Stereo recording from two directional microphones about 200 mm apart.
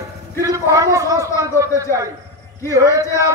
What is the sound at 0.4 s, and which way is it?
A man's voice, 15° right (ahead or behind).